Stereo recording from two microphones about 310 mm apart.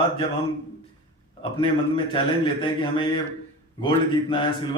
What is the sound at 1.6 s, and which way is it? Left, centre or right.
A man's voice, centre.